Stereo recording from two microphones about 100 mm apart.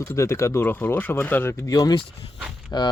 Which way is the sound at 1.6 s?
35° left (ahead or behind).